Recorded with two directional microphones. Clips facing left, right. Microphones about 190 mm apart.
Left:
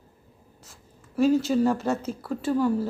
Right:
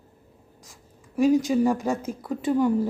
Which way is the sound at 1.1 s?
15° right (ahead or behind).